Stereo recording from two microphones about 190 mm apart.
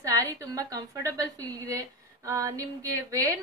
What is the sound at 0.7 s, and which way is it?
A woman's voice, 15° right (ahead or behind).